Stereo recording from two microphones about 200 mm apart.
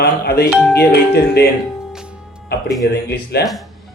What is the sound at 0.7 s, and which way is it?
Speech, 55° left (ahead or behind).